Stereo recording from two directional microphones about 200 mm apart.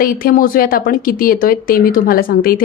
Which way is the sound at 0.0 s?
45° left (ahead or behind).